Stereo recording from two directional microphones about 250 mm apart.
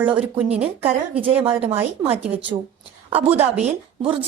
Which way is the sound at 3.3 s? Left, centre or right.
Right.